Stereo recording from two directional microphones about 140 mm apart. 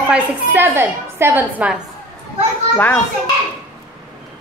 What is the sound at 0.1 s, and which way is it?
A woman's voice, 15° right (ahead or behind).